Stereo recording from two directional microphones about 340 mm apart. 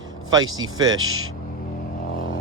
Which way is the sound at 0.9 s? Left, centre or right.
Right.